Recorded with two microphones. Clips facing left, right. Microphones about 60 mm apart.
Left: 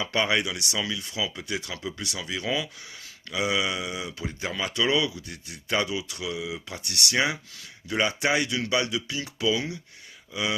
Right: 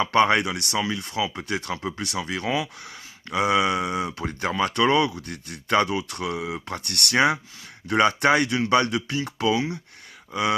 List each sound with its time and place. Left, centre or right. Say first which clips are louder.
0.0 s speech: right 6 dB; right